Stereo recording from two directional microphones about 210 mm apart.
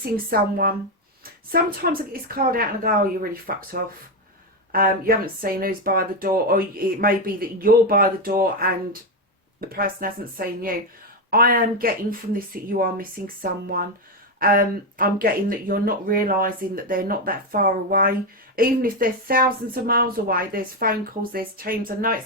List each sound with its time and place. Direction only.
0.0 s speech: 45° right (ahead or behind)